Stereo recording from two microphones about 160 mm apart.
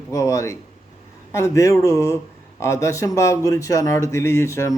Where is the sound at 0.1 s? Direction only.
20° left (ahead or behind).